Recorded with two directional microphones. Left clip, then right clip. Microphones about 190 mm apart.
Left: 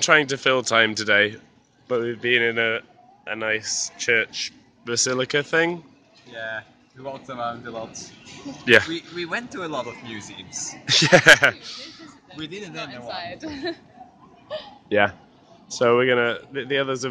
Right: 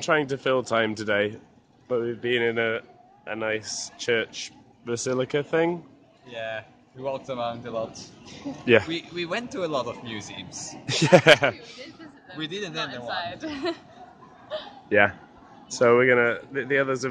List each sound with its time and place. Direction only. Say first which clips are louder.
0.0 s speech: left 6 dB; 5° left (ahead or behind)
7.1 s speech: right 1 dB; 30° right (ahead or behind)
8.6 s speech: left 4 dB; centre (ahead or behind)
8.9 s speech: left 1 dB; 65° right (ahead or behind)
10.6 s speech: left 7 dB; 10° right (ahead or behind)
12.4 s a man's voice: right 2 dB; 25° right (ahead or behind)
13.0 s speech: even; 25° left (ahead or behind)
13.4 s speech: even; 5° right (ahead or behind)
14.9 s speech: even; 15° left (ahead or behind)